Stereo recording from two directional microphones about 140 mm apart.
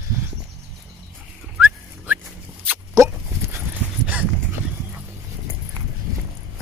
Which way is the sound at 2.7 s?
20° right (ahead or behind).